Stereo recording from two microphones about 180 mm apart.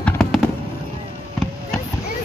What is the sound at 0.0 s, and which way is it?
Fireworks, 5° left (ahead or behind).